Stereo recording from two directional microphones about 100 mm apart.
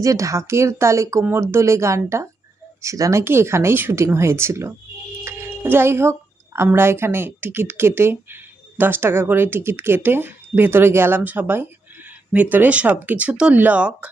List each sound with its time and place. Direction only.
0.0 s speech: 35° right (ahead or behind)
5.2 s a sound: 25° right (ahead or behind)
6.7 s speech: 25° right (ahead or behind)